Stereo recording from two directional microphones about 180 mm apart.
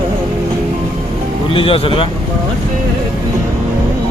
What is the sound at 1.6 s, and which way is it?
Speech, 30° left (ahead or behind).